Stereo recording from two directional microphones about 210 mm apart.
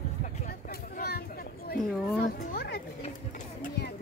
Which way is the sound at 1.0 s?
50° left (ahead or behind).